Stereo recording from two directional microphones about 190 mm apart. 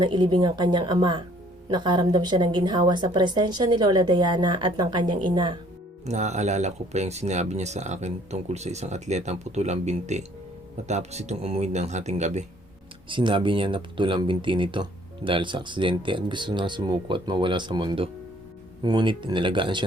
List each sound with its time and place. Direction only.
0.0 s speech: 25° right (ahead or behind)
6.1 s speech: 35° right (ahead or behind)
13.1 s speech: 25° right (ahead or behind)